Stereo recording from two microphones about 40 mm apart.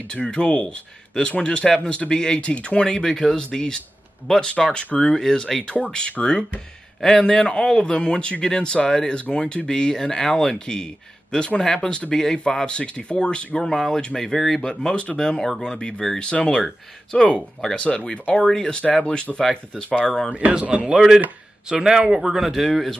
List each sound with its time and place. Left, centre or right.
0.3 s speech: left
2.9 s speech: centre
5.0 s speech: centre
7.0 s speech: centre
12.6 s speech: left
13.6 s speech: centre
16.2 s speech: left; by 17.7 s centre
17.7 s speech: left
18.3 s speech: centre
19.4 s speech: centre
20.3 s speech: right
21.8 s a man's voice: centre
22.7 s speech: centre